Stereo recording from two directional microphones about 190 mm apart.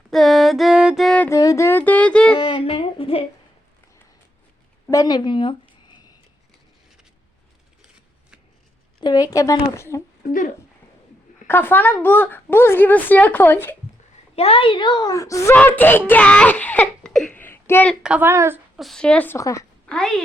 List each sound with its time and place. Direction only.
0.1 s music: centre (ahead or behind)
2.4 s humming: 30° left (ahead or behind)
4.9 s a sound: 20° left (ahead or behind)
9.0 s speech: 20° left (ahead or behind)
11.4 s speech: 10° left (ahead or behind)
14.3 s a child's voice: 30° left (ahead or behind); by 17.9 s 10° left (ahead or behind)
18.0 s a woman's voice: 10° right (ahead or behind)
18.8 s speech: centre (ahead or behind)
19.9 s speech: 5° left (ahead or behind)